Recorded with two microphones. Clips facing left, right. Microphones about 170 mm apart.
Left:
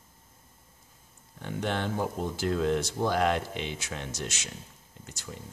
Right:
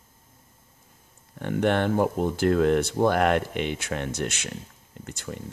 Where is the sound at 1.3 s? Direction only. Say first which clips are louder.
Right 8 dB; 60° right (ahead or behind).